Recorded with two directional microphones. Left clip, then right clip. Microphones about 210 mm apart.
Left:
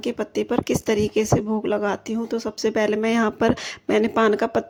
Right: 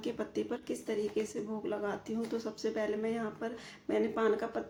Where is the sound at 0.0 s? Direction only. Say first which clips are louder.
Left 11 dB; 40° left (ahead or behind).